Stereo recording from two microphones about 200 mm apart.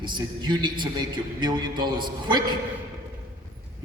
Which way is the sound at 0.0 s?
20° right (ahead or behind).